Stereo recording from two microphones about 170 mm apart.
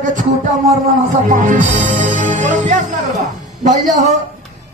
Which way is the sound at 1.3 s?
45° right (ahead or behind).